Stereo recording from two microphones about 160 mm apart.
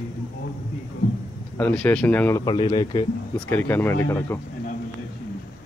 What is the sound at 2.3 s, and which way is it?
Speech, 30° left (ahead or behind).